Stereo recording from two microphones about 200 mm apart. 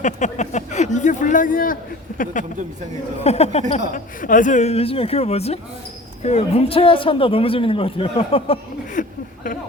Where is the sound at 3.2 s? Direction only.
30° left (ahead or behind).